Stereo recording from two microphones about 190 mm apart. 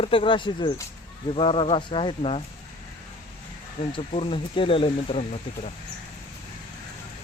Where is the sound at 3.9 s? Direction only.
25° left (ahead or behind).